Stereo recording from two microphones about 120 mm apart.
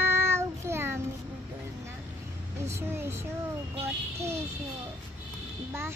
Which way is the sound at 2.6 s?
20° right (ahead or behind).